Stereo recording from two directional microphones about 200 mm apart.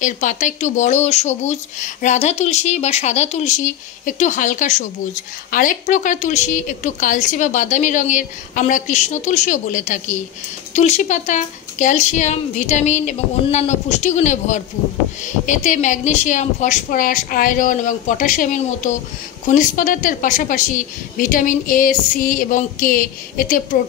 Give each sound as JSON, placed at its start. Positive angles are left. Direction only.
{"t": 0.0, "sound": "speech", "side_deg": 40}